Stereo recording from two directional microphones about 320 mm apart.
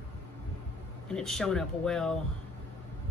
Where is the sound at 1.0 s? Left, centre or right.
Centre.